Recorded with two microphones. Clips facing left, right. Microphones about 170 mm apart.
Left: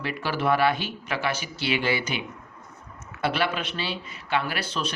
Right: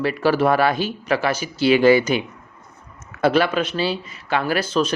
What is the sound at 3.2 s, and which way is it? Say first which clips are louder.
Speech: right 8 dB; 40° right (ahead or behind).